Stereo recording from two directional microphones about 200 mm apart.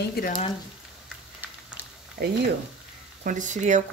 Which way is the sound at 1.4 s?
10° right (ahead or behind).